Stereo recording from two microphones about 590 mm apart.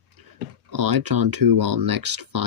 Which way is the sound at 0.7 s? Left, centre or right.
Right.